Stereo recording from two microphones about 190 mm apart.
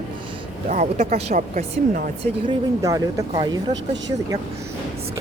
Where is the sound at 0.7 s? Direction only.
40° right (ahead or behind).